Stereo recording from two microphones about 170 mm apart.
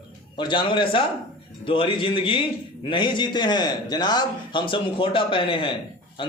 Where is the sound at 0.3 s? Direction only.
30° left (ahead or behind).